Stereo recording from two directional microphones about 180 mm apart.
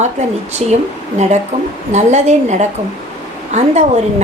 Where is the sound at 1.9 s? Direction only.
40° right (ahead or behind).